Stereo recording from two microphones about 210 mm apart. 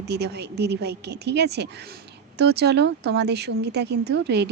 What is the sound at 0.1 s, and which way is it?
A woman's voice, 55° right (ahead or behind).